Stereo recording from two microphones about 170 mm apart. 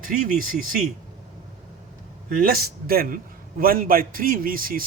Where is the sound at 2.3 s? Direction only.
60° right (ahead or behind).